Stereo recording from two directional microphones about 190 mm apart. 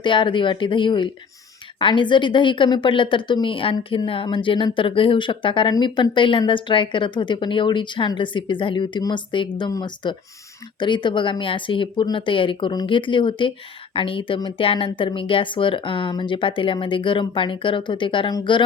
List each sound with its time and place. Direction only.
0.0 s a woman's voice: 25° left (ahead or behind)